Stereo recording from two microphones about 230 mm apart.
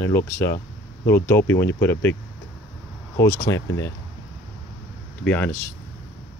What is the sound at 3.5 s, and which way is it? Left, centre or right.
Speech, centre.